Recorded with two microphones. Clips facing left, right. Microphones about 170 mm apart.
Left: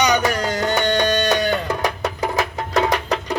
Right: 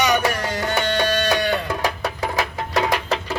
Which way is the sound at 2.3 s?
20° left (ahead or behind).